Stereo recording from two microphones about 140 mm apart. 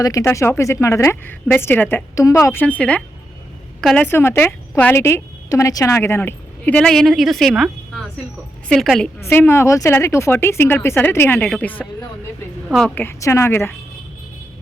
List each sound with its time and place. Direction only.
0.0 s a woman's voice: 25° left (ahead or behind); by 9.0 s centre (ahead or behind)
9.2 s speech: 15° left (ahead or behind)